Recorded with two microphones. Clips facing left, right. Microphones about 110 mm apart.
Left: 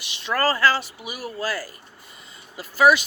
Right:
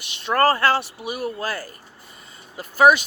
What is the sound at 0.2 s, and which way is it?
Speech, 50° right (ahead or behind).